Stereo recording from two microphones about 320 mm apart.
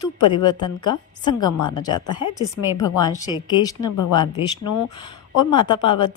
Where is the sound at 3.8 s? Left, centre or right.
Left.